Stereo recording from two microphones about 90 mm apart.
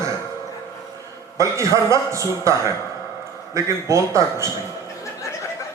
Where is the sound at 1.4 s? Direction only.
35° right (ahead or behind).